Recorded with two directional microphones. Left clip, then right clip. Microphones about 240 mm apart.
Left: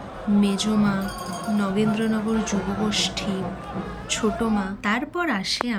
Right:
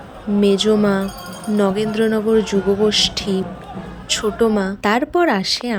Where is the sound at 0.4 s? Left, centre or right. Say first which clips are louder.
Right 13 dB; centre.